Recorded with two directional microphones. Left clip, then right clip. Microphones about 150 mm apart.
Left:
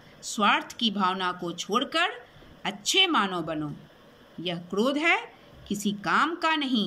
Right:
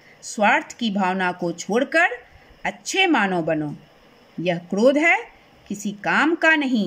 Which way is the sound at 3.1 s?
85° right.